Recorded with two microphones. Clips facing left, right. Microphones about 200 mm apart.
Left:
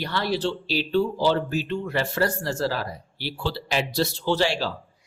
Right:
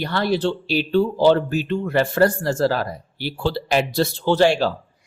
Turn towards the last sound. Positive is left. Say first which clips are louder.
# right 7 dB
turn(degrees=-50)  # may be behind; listen again after turning